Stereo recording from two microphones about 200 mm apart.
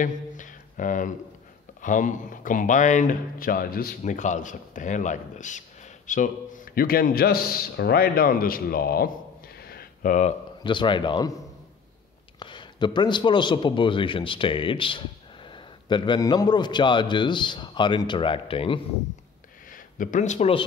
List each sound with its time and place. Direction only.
0.0 s a sound: 40° left (ahead or behind)
1.8 s a man's voice: 40° left (ahead or behind)
10.6 s a man's voice: 25° left (ahead or behind)
12.4 s a man's voice: 25° left (ahead or behind)
19.7 s speech: 40° left (ahead or behind)